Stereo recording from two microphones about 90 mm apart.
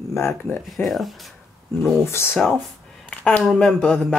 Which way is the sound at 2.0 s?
25° left (ahead or behind).